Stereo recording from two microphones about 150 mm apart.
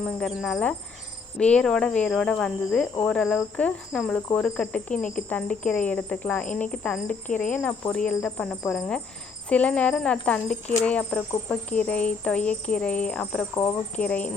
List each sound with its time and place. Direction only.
0.0 s speech: centre (ahead or behind)
13.5 s speech: 25° left (ahead or behind)
13.9 s speech: 10° left (ahead or behind)